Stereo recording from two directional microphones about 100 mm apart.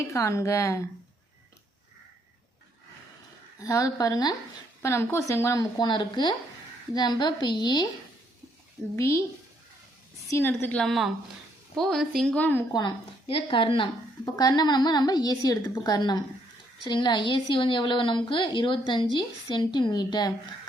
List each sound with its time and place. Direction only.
0.0 s speech: 30° left (ahead or behind)
3.6 s speech: 35° left (ahead or behind)
4.8 s a woman's voice: 30° left (ahead or behind)
5.7 s a woman's voice: 50° left (ahead or behind)
9.0 s speech: 30° left (ahead or behind)
10.2 s speech: 25° left (ahead or behind)
10.8 s a woman's voice: centre (ahead or behind); by 12.6 s 15° left (ahead or behind)
13.2 s speech: 65° left (ahead or behind)
14.3 s a woman's voice: 45° left (ahead or behind)